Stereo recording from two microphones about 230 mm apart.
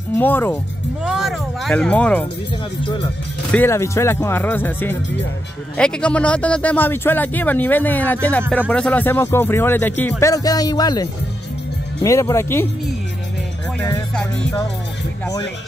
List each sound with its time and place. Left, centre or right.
0.1 s speech: centre
2.8 s speech: left
3.5 s speech: centre
13.7 s speech: centre
14.1 s music: centre